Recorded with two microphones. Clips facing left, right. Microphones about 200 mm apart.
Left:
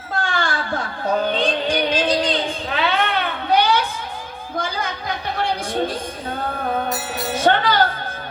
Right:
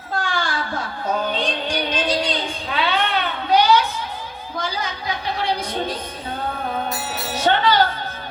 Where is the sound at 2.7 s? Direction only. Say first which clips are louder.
Even; 50° left (ahead or behind).